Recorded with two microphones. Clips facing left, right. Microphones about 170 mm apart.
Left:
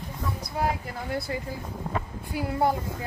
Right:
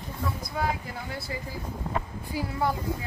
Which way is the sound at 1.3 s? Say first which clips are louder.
Left 2 dB; 55° left (ahead or behind).